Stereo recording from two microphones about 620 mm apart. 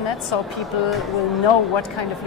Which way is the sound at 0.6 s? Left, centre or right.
Centre.